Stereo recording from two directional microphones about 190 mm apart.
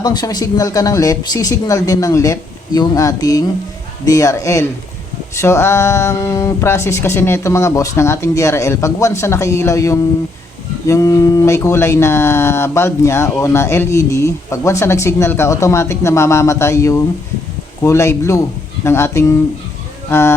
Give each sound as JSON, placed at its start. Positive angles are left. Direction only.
{"t": 0.0, "sound": "speech", "side_deg": 20}